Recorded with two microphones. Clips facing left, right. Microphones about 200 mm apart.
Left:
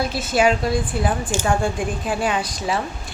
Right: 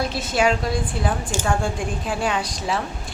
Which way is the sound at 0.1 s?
5° left (ahead or behind).